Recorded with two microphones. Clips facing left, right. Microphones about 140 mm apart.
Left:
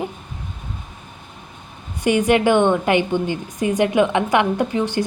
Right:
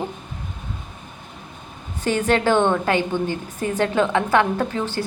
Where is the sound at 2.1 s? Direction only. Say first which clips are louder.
Left 3 dB; 15° left (ahead or behind).